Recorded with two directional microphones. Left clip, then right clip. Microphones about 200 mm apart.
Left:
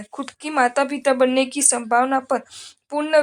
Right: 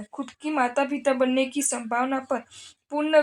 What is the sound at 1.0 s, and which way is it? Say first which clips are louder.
Speech: left 6 dB; 35° left (ahead or behind).